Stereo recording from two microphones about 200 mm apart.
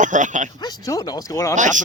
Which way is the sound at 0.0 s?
40° right (ahead or behind).